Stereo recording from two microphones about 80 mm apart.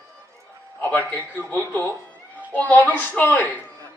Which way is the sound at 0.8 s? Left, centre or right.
Left.